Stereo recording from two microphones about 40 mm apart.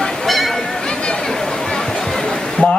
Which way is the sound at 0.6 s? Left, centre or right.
Centre.